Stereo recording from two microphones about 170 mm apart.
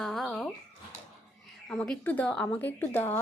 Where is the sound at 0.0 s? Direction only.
Centre (ahead or behind).